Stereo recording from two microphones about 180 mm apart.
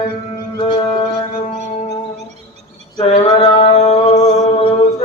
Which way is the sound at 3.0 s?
25° left (ahead or behind).